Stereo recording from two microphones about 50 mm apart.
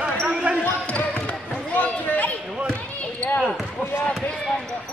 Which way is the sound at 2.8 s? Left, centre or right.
Left.